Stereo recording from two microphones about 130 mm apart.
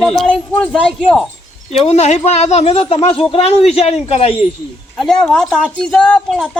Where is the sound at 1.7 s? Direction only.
55° left (ahead or behind).